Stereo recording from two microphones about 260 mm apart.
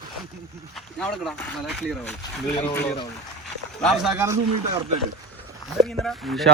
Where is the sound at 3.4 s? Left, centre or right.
Centre.